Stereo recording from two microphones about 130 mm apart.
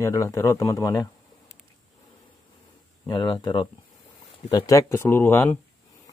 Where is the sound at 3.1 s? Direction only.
35° left (ahead or behind); by 5.6 s 15° left (ahead or behind).